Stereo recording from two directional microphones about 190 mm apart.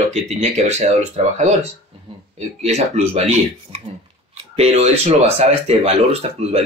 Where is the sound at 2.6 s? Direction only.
35° right (ahead or behind).